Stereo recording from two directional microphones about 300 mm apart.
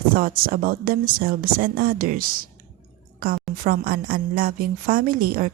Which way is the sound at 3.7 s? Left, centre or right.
Right.